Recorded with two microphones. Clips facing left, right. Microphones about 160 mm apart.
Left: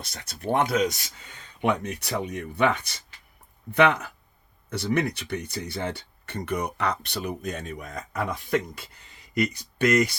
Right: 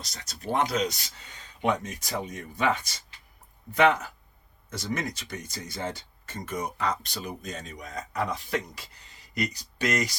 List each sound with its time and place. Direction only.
0.0 s speech: 55° left (ahead or behind)
1.6 s speech: 65° left (ahead or behind)